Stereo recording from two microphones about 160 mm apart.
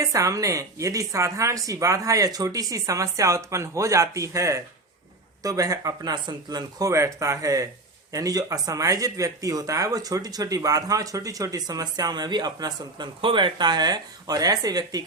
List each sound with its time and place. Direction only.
0.0 s speech: 20° right (ahead or behind)